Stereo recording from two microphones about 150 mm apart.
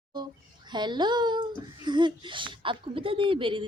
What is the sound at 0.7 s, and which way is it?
Speech, 30° right (ahead or behind).